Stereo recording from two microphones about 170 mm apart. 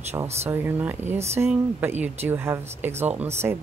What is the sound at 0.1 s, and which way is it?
Speech, 20° right (ahead or behind).